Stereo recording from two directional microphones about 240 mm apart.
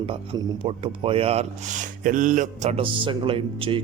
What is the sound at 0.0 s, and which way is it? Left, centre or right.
A man's voice, right.